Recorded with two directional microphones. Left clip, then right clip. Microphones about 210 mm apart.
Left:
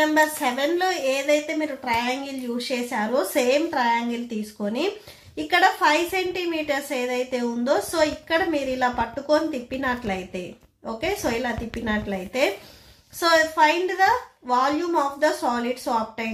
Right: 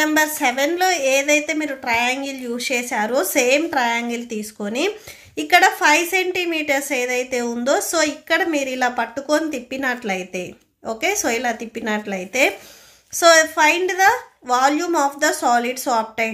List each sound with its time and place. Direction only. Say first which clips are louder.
0.0 s a woman's voice: right 2 dB; 25° right (ahead or behind)